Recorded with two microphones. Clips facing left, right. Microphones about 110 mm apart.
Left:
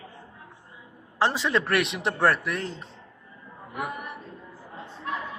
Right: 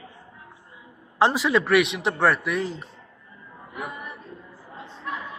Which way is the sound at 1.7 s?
Centre (ahead or behind).